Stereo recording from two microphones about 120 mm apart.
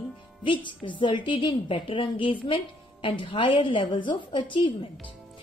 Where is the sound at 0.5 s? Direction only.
45° left (ahead or behind).